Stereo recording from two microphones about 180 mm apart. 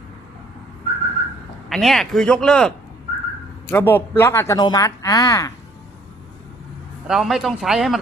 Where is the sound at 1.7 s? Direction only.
Centre (ahead or behind); by 5.5 s 20° left (ahead or behind).